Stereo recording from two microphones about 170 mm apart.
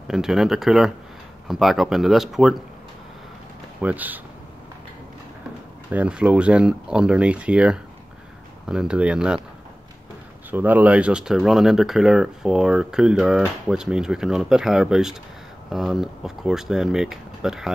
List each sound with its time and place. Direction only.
0.1 s speech: 5° right (ahead or behind)
3.8 s speech: 10° right (ahead or behind)
5.9 s speech: 5° right (ahead or behind)
10.5 s speech: 10° right (ahead or behind)